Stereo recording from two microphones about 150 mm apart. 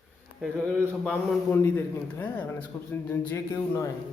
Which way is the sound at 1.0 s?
10° left (ahead or behind).